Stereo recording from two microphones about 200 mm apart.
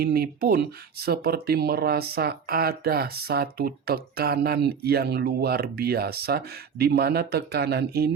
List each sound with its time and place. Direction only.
0.0 s speech: 50° right (ahead or behind)